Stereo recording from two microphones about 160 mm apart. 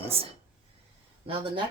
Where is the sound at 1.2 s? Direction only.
30° right (ahead or behind).